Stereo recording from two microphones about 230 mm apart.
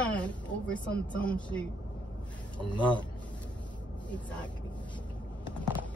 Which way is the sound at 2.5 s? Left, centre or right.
Centre.